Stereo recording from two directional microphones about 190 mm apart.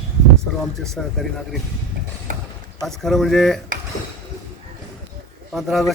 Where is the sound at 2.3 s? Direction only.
45° right (ahead or behind).